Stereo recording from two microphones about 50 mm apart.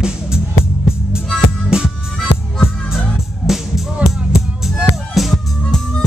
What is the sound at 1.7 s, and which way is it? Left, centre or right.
Music, centre.